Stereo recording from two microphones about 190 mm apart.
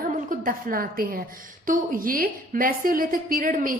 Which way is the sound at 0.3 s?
50° right (ahead or behind).